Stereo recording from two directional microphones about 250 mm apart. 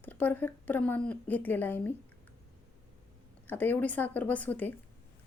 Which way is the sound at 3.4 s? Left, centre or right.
Centre.